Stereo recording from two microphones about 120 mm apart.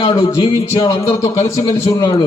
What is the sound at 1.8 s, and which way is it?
Speech, 30° left (ahead or behind).